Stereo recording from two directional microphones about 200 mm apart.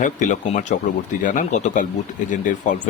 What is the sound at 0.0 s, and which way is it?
Speech, 40° left (ahead or behind).